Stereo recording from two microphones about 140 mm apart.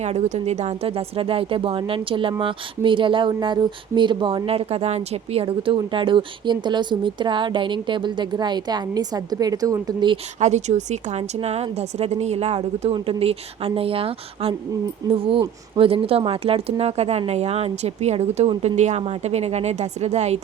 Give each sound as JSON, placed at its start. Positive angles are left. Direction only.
{"t": 0.0, "sound": "speech", "side_deg": -55}
{"t": 10.4, "sound": "a woman's voice", "side_deg": -55}